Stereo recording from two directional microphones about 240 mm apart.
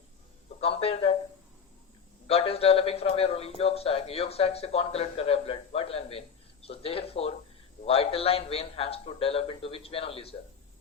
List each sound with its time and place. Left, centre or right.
0.6 s speech: left
2.2 s speech: left